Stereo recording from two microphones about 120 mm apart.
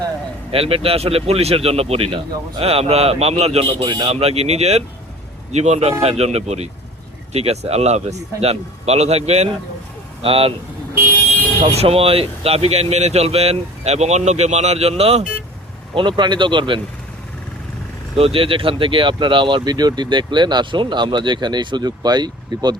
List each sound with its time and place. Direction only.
0.5 s speech: 55° right (ahead or behind)
10.2 s speech: 50° right (ahead or behind)
11.6 s speech: 55° right (ahead or behind)
16.0 s speech: 40° right (ahead or behind)
18.2 s speech: 50° right (ahead or behind)